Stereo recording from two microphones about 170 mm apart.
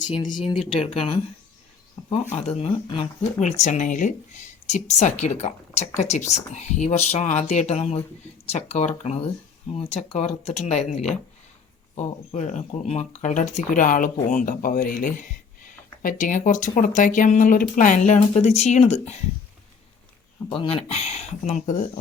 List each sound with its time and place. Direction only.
0.3 s speech: 30° left (ahead or behind)
2.3 s speech: 40° left (ahead or behind)
20.5 s speech: 30° left (ahead or behind)